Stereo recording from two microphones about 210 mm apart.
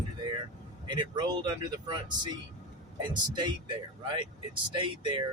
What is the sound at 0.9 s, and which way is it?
Speech, 20° right (ahead or behind).